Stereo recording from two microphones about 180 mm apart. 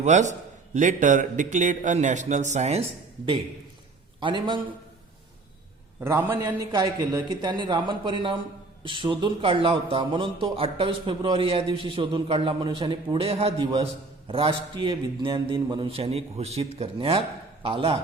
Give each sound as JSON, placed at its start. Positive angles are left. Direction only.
{"t": 0.0, "sound": "a man's voice", "side_deg": -40}
{"t": 4.2, "sound": "a man's voice", "side_deg": -25}
{"t": 6.0, "sound": "a man's voice", "side_deg": -15}